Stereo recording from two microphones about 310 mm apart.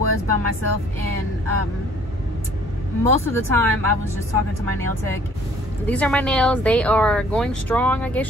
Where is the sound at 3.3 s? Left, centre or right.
Centre.